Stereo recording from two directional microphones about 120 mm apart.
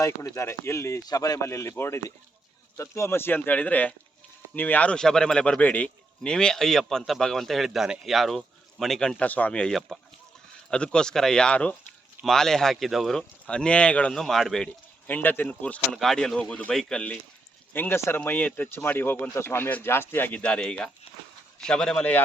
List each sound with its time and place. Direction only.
0.0 s a man's voice: 25° left (ahead or behind); by 14.7 s 5° left (ahead or behind)
15.0 s speech: 15° left (ahead or behind)